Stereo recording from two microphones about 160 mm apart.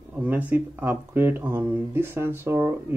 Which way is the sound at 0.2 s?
10° right (ahead or behind).